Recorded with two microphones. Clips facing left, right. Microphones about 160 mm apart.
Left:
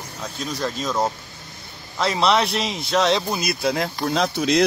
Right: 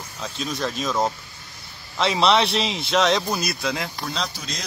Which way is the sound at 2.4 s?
25° right (ahead or behind).